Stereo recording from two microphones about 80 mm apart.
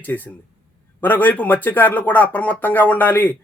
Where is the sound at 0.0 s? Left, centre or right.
Left.